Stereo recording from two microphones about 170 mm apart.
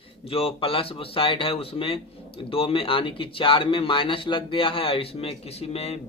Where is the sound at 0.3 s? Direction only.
35° left (ahead or behind).